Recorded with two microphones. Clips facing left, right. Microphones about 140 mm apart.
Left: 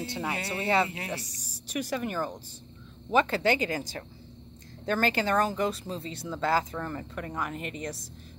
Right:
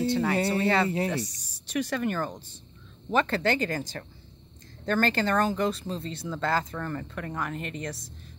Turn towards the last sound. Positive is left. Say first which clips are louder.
# right 1 dB
turn(degrees=10)  # may be behind; listen again after turning